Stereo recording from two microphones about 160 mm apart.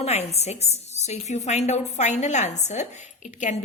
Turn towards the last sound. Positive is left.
turn(degrees=50)  # may be behind; listen again after turning